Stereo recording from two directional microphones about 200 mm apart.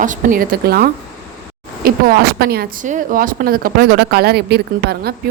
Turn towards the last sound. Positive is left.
turn(degrees=-55)  # may be behind; listen again after turning